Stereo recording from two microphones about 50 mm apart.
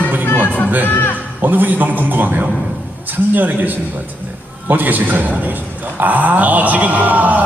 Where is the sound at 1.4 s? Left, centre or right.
Right.